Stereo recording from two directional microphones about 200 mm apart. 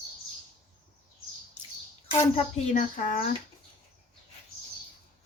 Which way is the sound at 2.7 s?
40° left (ahead or behind).